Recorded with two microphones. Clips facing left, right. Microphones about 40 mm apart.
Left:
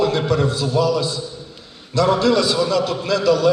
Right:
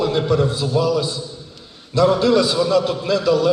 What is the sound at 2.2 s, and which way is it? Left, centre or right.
A man's voice, centre.